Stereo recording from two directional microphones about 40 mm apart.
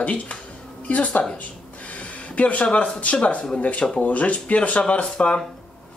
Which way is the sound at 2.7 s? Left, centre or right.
Left.